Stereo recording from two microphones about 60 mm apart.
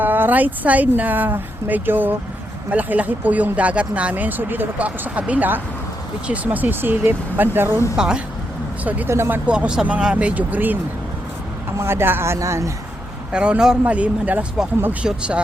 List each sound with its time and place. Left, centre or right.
0.0 s speech: right
7.9 s a man's voice: centre
8.8 s speech: right
9.0 s speech: right
9.5 s a man's voice: centre
11.8 s speech: right
13.3 s a man's voice: centre